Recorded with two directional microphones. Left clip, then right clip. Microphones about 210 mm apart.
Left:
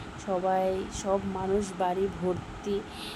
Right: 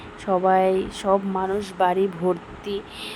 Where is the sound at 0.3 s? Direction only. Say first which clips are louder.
Right 8 dB; 20° right (ahead or behind).